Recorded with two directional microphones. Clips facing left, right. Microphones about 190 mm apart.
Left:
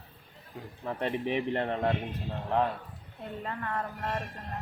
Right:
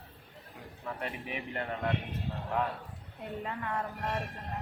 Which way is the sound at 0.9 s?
30° left (ahead or behind).